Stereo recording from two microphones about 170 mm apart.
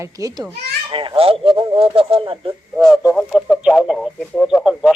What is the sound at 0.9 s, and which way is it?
Speech, 30° right (ahead or behind).